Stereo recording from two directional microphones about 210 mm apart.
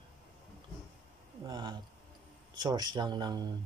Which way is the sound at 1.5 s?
20° right (ahead or behind).